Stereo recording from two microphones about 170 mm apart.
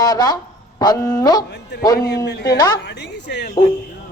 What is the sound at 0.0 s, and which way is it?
A woman's voice, 25° left (ahead or behind).